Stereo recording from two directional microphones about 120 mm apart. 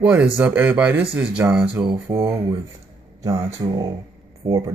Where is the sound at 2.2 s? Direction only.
45° right (ahead or behind).